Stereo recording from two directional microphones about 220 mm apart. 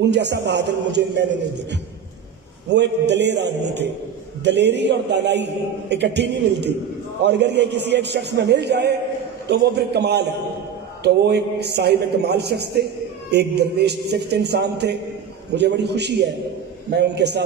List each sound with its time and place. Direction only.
0.0 s a man's voice: 50° right (ahead or behind)
2.7 s a man's voice: 50° right (ahead or behind)